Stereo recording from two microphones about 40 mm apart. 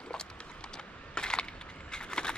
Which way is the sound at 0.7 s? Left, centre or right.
Left.